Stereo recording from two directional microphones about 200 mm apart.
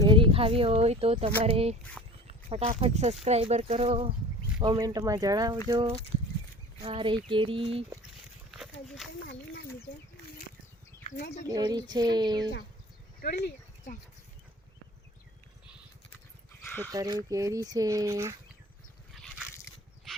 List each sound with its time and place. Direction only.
0.0 s speech: 25° right (ahead or behind)
2.0 s a sound: centre (ahead or behind)
2.5 s speech: 30° right (ahead or behind)
4.6 s speech: 20° right (ahead or behind)
8.4 s walk: centre (ahead or behind)
9.2 s a sound: 60° left (ahead or behind)
11.4 s speech: 20° right (ahead or behind)
13.2 s speech: 55° left (ahead or behind)
16.6 s dog: 10° left (ahead or behind)
16.9 s speech: 20° right (ahead or behind)
19.1 s a sound: centre (ahead or behind)